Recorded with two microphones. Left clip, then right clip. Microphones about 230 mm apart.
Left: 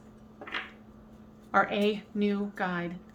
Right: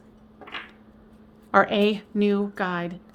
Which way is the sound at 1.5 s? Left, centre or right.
Right.